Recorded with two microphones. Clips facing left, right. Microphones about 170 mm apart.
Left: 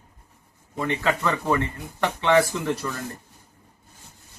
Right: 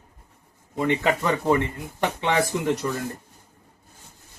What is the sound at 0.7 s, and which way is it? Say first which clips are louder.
Speech: right 2 dB; 20° right (ahead or behind).